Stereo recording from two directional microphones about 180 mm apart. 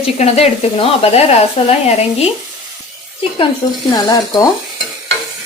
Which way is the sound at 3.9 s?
20° left (ahead or behind).